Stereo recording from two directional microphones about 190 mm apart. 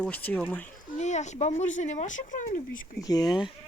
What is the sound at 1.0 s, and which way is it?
Speech, 40° left (ahead or behind).